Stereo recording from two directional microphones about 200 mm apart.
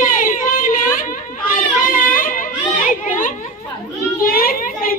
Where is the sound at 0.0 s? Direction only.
40° left (ahead or behind).